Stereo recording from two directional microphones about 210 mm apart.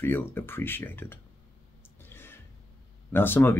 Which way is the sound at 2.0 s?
10° left (ahead or behind).